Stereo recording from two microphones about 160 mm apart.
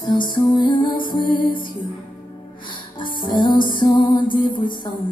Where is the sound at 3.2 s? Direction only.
30° left (ahead or behind).